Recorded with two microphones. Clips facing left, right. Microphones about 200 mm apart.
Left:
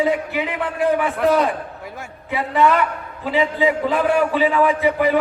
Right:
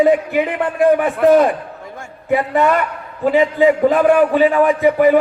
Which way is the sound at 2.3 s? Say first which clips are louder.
Right 3 dB; 50° right (ahead or behind).